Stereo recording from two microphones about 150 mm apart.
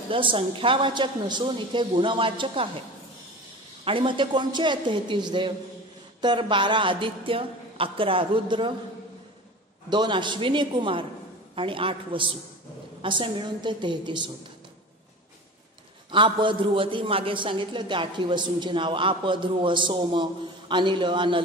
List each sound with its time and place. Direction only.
0.1 s a man's voice: 35° right (ahead or behind)
3.8 s a man's voice: 35° right (ahead or behind)
9.8 s a man's voice: 30° right (ahead or behind)
16.1 s a man's voice: 35° right (ahead or behind)